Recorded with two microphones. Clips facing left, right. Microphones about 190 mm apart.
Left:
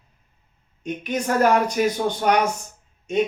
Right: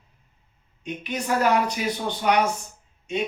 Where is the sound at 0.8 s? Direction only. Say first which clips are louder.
Left 4 dB; 45° left (ahead or behind).